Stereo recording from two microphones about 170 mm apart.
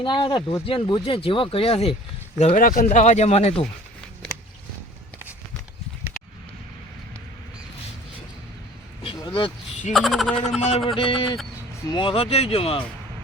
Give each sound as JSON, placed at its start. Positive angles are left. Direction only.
{"t": 0.0, "sound": "speech", "side_deg": 25}
{"t": 2.6, "sound": "speech", "side_deg": 50}
{"t": 9.0, "sound": "a sound", "side_deg": 30}
{"t": 9.9, "sound": "speech", "side_deg": 0}
{"t": 10.6, "sound": "speech", "side_deg": 35}